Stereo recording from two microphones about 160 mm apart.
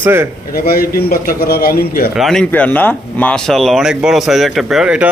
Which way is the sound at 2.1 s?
Centre (ahead or behind).